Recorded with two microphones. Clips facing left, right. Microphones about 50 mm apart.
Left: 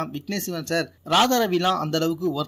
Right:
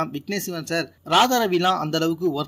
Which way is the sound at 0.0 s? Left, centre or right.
Right.